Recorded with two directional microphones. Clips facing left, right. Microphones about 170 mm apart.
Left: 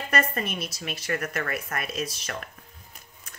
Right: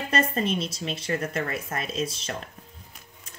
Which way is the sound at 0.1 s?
25° right (ahead or behind).